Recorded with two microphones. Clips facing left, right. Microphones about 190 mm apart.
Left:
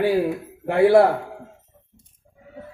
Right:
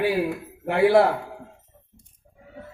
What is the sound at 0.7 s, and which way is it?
Speech, 50° left (ahead or behind).